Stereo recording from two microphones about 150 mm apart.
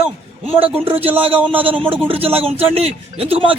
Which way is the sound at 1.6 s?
35° right (ahead or behind).